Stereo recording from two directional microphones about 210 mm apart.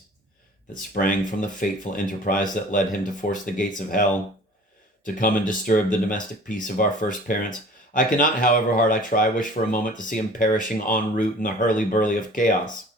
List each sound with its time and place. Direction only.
0.7 s speech: 40° left (ahead or behind)
5.0 s speech: 40° left (ahead or behind)